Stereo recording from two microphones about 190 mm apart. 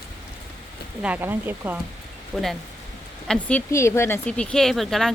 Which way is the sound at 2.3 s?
Centre (ahead or behind).